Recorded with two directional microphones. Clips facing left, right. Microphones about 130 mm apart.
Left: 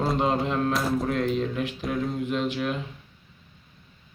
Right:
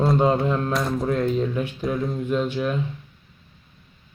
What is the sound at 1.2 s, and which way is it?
Speech, 30° right (ahead or behind).